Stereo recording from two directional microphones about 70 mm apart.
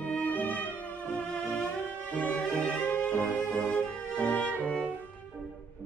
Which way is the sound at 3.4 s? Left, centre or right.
Centre.